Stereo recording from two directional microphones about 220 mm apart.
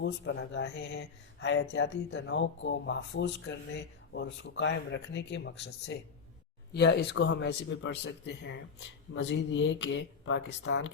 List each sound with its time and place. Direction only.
0.0 s a man's voice: 55° left (ahead or behind)